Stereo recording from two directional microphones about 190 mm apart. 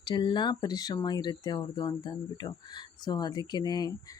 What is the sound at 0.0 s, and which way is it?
Speech, 25° left (ahead or behind).